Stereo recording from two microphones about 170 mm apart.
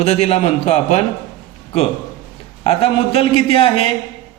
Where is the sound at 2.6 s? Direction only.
35° left (ahead or behind).